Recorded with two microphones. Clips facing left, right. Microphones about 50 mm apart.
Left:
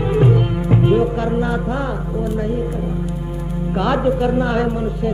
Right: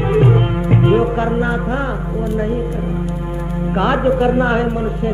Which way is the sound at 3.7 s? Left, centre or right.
Right.